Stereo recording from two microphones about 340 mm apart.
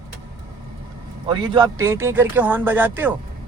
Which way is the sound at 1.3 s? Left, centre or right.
Centre.